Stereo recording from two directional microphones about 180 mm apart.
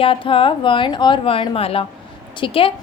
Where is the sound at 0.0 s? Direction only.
30° left (ahead or behind).